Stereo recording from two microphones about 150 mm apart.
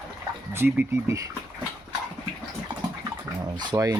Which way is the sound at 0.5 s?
15° right (ahead or behind).